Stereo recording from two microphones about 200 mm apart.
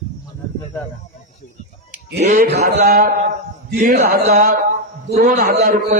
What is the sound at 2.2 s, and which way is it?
A man's voice, 45° right (ahead or behind).